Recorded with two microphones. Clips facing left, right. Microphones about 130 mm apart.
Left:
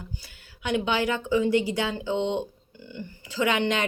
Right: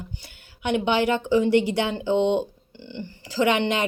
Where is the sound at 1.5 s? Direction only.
65° right (ahead or behind).